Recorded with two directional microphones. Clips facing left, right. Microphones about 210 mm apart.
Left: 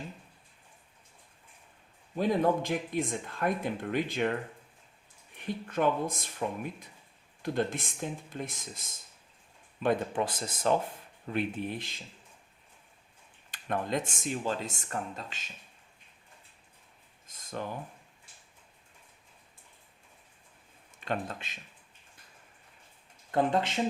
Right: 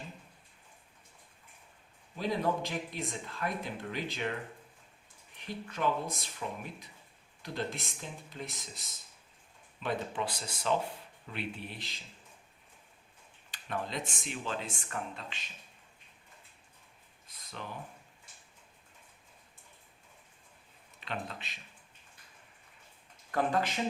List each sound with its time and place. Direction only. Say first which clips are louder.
2.1 s speech: left 5 dB; 50° left (ahead or behind)
5.4 s speech: left 5 dB; 50° left (ahead or behind)
7.4 s speech: left 7 dB; 50° left (ahead or behind)
13.5 s speech: left 6 dB; 50° left (ahead or behind)
17.2 s a sound: left 8 dB; 45° left (ahead or behind)
21.0 s speech: left 6 dB; 45° left (ahead or behind)
23.3 s speech: left 3 dB; 25° left (ahead or behind)